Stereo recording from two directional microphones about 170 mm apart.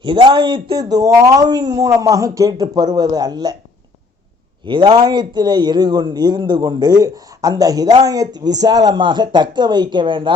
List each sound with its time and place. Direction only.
0.0 s a man's voice: 30° right (ahead or behind)
4.6 s a man's voice: 30° right (ahead or behind)